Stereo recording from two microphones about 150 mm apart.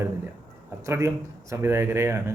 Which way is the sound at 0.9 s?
20° right (ahead or behind).